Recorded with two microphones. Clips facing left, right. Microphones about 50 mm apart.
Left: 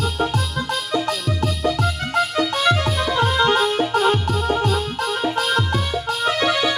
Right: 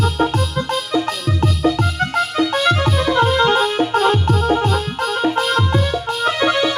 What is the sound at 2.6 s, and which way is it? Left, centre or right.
Music, centre.